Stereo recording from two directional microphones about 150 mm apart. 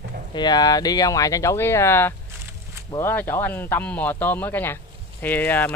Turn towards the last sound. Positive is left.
turn(degrees=10)  # may be behind; listen again after turning